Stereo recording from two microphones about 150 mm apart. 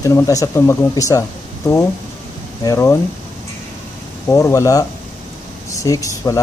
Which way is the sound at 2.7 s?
15° left (ahead or behind).